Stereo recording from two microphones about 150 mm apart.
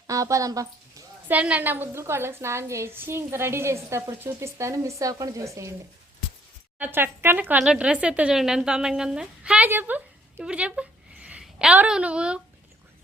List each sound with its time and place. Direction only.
0.1 s a woman's voice: 20° right (ahead or behind)
1.3 s a woman's voice: 10° right (ahead or behind)
6.7 s speech: 15° right (ahead or behind)